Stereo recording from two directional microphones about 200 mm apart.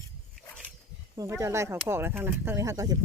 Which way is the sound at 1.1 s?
15° right (ahead or behind).